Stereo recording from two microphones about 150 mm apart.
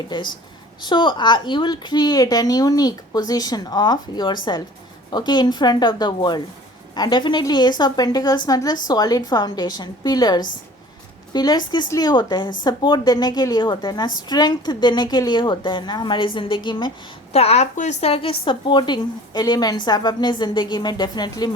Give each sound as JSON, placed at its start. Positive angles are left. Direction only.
{"t": 0.1, "sound": "a woman's voice", "side_deg": 30}
{"t": 17.3, "sound": "a woman's voice", "side_deg": 45}